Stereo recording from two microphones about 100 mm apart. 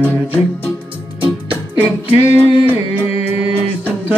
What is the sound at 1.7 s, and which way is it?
Music, 15° right (ahead or behind).